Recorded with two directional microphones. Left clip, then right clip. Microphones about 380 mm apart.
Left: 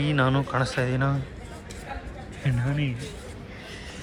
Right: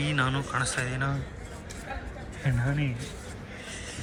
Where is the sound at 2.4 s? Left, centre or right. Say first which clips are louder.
Left 1 dB; right.